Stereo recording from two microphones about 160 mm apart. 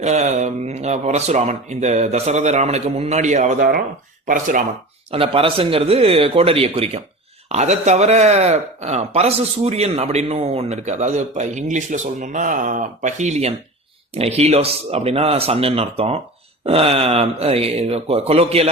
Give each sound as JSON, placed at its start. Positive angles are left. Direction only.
{"t": 0.0, "sound": "speech", "side_deg": -45}
{"t": 5.1, "sound": "speech", "side_deg": -35}